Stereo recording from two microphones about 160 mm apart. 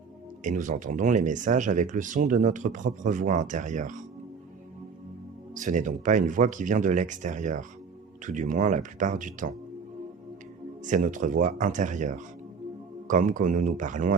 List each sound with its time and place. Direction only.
0.4 s speech: 50° right (ahead or behind)
5.5 s speech: 50° right (ahead or behind)
10.8 s speech: 55° right (ahead or behind)